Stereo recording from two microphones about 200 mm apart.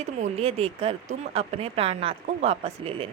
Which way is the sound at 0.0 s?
30° right (ahead or behind).